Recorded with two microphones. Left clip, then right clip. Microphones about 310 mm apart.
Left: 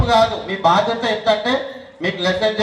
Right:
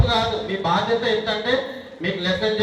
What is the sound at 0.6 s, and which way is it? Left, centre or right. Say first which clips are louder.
A man's voice: left 6 dB; left.